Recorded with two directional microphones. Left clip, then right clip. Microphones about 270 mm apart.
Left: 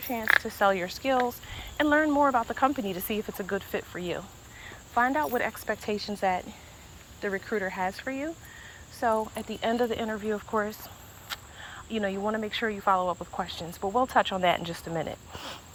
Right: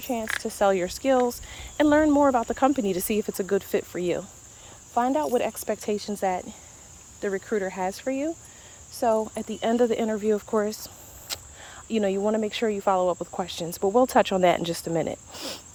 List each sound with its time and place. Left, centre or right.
0.1 s speech: right